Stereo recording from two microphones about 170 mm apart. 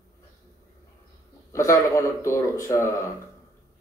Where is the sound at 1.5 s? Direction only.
20° left (ahead or behind).